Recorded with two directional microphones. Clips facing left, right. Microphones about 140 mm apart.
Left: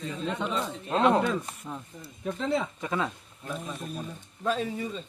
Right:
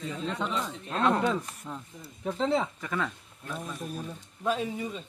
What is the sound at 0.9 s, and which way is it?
Speech, 20° left (ahead or behind).